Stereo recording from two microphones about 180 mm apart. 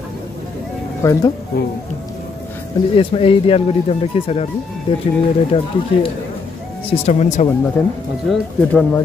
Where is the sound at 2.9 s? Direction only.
30° left (ahead or behind).